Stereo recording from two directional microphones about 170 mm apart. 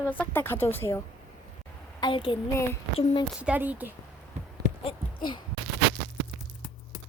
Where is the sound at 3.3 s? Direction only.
5° right (ahead or behind).